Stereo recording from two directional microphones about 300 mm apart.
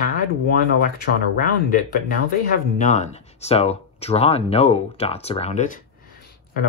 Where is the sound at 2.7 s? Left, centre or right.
Left.